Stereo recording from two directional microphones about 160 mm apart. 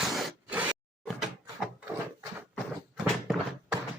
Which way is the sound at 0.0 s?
Centre (ahead or behind).